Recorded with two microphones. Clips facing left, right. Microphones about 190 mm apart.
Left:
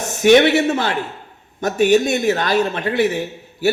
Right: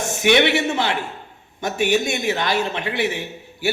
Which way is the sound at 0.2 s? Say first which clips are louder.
Left 6 dB; 45° left (ahead or behind).